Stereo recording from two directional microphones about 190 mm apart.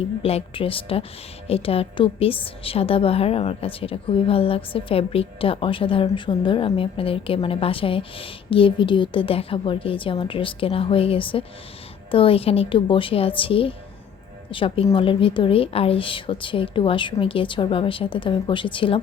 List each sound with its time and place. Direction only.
0.0 s a woman's voice: 30° left (ahead or behind)